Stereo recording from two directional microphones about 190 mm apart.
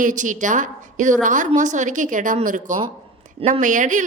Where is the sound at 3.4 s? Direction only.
30° right (ahead or behind).